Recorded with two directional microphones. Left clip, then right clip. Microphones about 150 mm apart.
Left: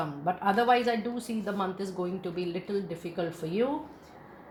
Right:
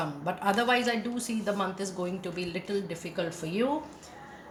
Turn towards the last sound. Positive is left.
turn(degrees=35)  # may be behind; listen again after turning